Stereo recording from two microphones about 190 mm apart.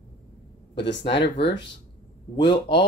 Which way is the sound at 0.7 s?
65° left (ahead or behind).